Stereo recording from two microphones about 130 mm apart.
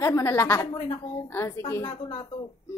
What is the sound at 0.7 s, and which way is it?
Speech, 35° left (ahead or behind).